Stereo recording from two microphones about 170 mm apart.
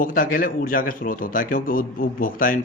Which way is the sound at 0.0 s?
55° left (ahead or behind).